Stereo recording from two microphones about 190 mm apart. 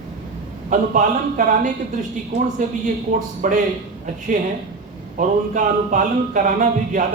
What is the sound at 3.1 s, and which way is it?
Speech, 40° right (ahead or behind).